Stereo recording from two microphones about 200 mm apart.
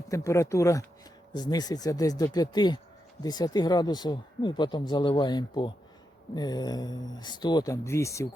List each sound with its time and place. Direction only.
0.1 s speech: 15° left (ahead or behind)